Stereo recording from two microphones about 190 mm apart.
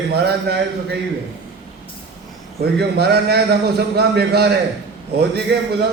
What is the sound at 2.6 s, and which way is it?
A man's voice, 60° right (ahead or behind).